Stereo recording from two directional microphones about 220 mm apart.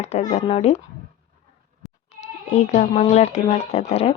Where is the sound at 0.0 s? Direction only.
30° left (ahead or behind).